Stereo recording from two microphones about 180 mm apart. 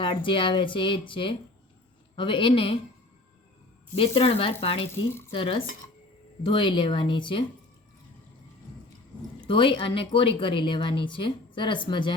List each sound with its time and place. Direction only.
0.0 s speech: 30° left (ahead or behind)
3.9 s speech: 30° left (ahead or behind)
9.5 s speech: 30° left (ahead or behind)